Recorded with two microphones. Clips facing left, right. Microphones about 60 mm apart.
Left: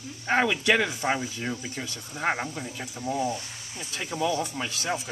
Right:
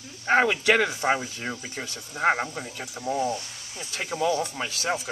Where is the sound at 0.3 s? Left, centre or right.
Right; by 3.3 s centre.